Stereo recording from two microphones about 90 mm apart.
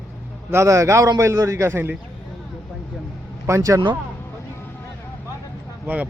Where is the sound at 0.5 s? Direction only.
35° right (ahead or behind).